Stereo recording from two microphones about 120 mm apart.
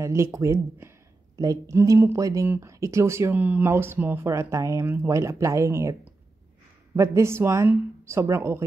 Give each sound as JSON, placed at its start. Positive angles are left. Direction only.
{"t": 0.0, "sound": "a sound", "side_deg": -25}
{"t": 1.4, "sound": "speech", "side_deg": -30}
{"t": 7.0, "sound": "speech", "side_deg": -25}